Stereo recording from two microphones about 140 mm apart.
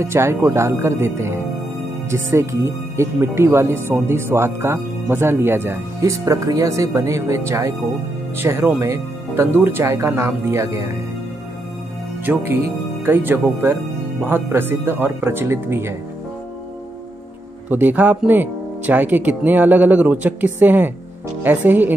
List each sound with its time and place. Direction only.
0.0 s speech: 20° right (ahead or behind)
12.3 s speech: 15° right (ahead or behind)
17.6 s speech: 10° right (ahead or behind)